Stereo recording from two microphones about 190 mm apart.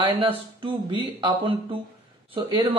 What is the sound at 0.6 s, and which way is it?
Speech, 25° right (ahead or behind).